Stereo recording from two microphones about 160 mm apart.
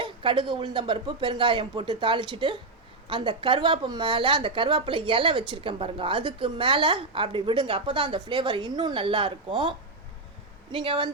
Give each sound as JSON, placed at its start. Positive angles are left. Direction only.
{"t": 0.0, "sound": "a woman's voice", "side_deg": -30}